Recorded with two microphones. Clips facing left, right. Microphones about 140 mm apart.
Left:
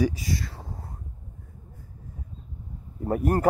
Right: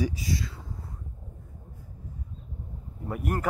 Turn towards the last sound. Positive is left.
turn(degrees=40)  # may be behind; listen again after turning